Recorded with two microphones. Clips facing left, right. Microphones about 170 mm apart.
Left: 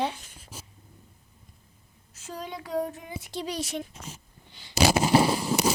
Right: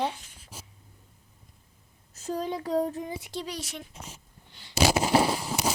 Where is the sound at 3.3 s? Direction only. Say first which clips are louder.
Left 7 dB; 20° left (ahead or behind).